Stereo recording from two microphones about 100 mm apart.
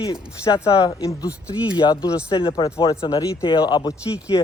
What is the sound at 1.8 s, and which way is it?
Speech, 55° left (ahead or behind).